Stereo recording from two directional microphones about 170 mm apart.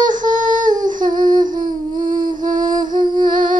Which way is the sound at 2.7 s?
25° right (ahead or behind).